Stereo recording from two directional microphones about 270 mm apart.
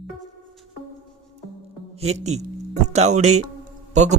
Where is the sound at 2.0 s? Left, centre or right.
Right.